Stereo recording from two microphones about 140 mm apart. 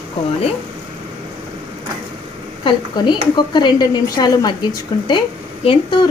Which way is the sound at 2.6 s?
35° left (ahead or behind).